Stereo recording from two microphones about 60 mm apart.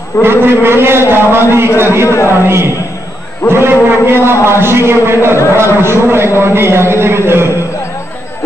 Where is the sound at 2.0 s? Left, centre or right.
Left.